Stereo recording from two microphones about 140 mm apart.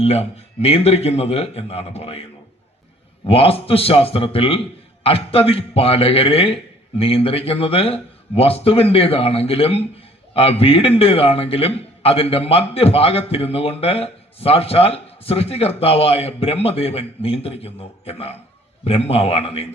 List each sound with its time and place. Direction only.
0.0 s a man's voice: 50° left (ahead or behind)
3.2 s a man's voice: 45° left (ahead or behind)